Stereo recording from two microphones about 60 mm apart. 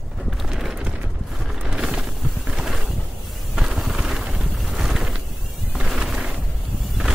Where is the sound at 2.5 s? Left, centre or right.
Centre.